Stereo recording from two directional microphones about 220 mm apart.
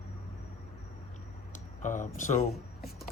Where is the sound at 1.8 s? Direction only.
35° left (ahead or behind).